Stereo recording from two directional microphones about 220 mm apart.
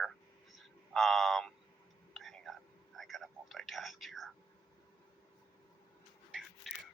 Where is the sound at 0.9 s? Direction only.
Centre (ahead or behind).